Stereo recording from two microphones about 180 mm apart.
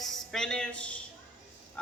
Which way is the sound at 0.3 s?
5° left (ahead or behind).